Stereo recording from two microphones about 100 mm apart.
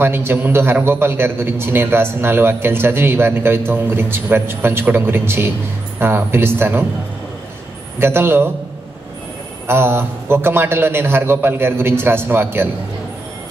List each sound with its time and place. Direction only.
0.0 s a man's voice: 25° right (ahead or behind)
8.0 s a man's voice: 25° right (ahead or behind)
9.7 s a man's voice: 25° right (ahead or behind)